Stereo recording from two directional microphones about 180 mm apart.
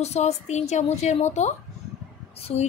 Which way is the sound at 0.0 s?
40° left (ahead or behind).